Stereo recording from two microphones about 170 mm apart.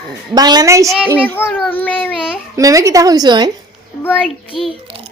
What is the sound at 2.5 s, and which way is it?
Speech, 20° right (ahead or behind).